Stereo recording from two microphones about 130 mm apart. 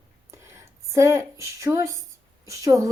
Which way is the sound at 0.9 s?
20° right (ahead or behind).